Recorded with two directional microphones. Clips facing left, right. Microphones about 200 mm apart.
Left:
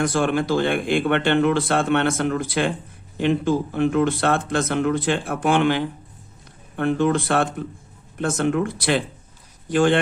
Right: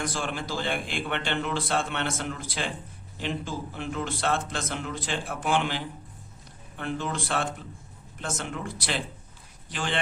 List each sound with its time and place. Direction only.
0.0 s speech: 60° left (ahead or behind)